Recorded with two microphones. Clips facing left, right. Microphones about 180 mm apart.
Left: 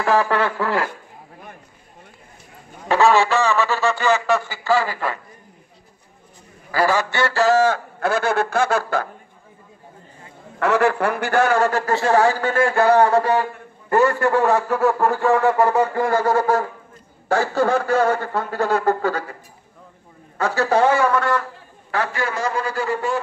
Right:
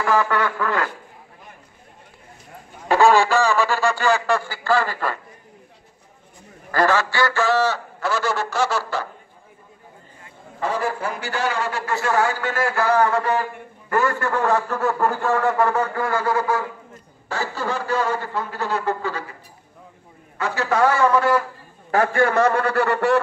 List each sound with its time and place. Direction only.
0.1 s a sound: 30° left (ahead or behind)
3.0 s honk: centre (ahead or behind)
4.0 s speech: 5° left (ahead or behind)
6.7 s speech: 10° left (ahead or behind)
7.3 s speech: 45° left (ahead or behind)
10.6 s a man's voice: 75° left (ahead or behind); by 11.9 s 45° left (ahead or behind)
11.9 s a sound: 30° left (ahead or behind)
12.7 s a man's voice: 25° left (ahead or behind)
14.2 s speech: 10° left (ahead or behind)
15.0 s honk: centre (ahead or behind)
16.1 s speech: 40° left (ahead or behind)
20.3 s a sound: 40° left (ahead or behind)
21.1 s a man's voice: 5° right (ahead or behind)
21.9 s a man's voice: 50° right (ahead or behind); by 23.1 s 65° right (ahead or behind)